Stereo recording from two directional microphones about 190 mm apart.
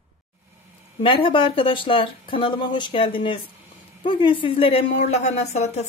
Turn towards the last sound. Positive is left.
turn(degrees=35)  # may be behind; listen again after turning